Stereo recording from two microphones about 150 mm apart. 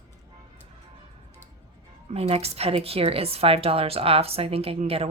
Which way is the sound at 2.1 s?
40° right (ahead or behind).